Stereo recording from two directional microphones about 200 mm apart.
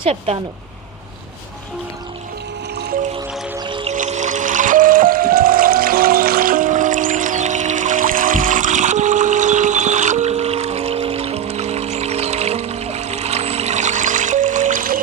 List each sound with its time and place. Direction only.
0.0 s speech: 30° right (ahead or behind)
3.6 s music: 25° right (ahead or behind)
3.9 s music: 35° right (ahead or behind)